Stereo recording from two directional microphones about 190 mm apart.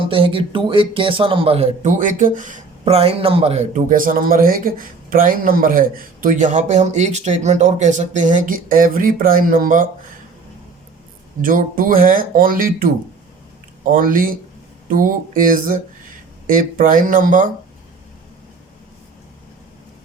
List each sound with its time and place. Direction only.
0.0 s speech: 30° right (ahead or behind); by 9.8 s 45° right (ahead or behind)
11.4 s speech: 45° right (ahead or behind)